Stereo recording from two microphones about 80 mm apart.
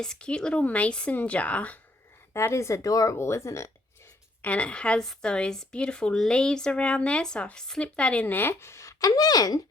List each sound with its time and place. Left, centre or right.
0.0 s speech: centre
2.3 s a woman's voice: left
4.4 s speech: centre; by 9.6 s left